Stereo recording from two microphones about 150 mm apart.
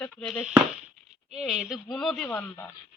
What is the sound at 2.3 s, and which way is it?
Speech, 15° left (ahead or behind).